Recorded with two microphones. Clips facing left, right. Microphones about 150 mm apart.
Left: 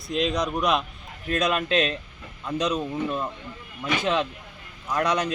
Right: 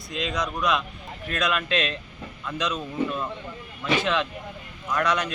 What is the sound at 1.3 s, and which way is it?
Speech, 35° left (ahead or behind).